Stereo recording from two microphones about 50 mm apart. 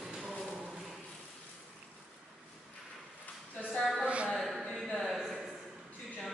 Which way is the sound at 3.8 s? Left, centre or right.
Centre.